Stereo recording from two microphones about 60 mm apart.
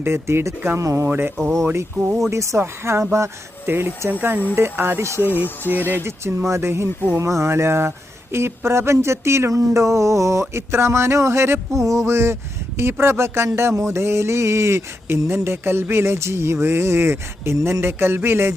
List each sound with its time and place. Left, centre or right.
0.0 s speech: right
0.8 s a sound: right
1.0 s speech: right
2.3 s a sound: right
2.6 s speech: right
3.7 s speech: right
5.6 s speech: left
5.9 s speech: right
9.6 s a sound: right
10.5 s speech: right